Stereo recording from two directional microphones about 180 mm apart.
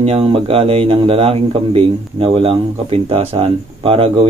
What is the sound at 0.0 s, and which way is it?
Speech, 30° right (ahead or behind).